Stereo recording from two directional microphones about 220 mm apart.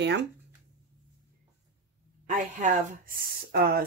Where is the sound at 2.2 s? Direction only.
35° right (ahead or behind).